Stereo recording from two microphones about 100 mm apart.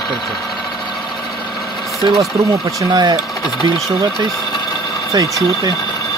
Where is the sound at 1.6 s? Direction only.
Centre (ahead or behind).